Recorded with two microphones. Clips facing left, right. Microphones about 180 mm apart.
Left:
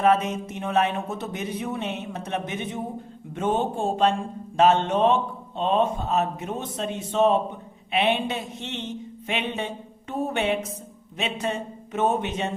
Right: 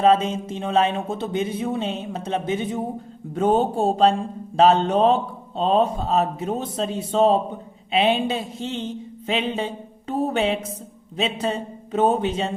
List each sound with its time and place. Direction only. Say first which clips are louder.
0.0 s speech: right 3 dB; 25° right (ahead or behind)